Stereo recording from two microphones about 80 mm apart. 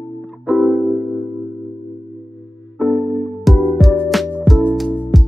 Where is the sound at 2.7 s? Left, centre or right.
Centre.